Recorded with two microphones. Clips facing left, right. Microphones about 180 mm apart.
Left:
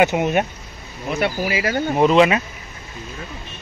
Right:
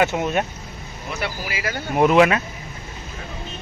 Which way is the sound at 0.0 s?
15° left (ahead or behind).